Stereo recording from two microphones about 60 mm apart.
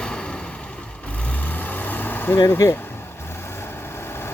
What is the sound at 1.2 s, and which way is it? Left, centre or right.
Vehicle, left.